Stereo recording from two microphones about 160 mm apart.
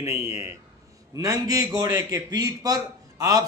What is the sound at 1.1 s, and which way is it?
A man's voice, 20° right (ahead or behind).